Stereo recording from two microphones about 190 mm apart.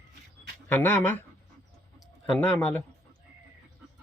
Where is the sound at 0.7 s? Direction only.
10° left (ahead or behind).